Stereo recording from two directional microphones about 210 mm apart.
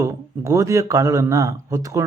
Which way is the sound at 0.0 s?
15° right (ahead or behind).